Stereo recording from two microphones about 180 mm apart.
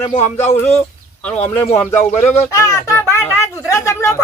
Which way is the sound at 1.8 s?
15° left (ahead or behind).